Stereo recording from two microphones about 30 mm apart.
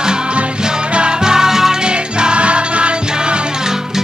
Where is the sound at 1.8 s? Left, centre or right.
Right.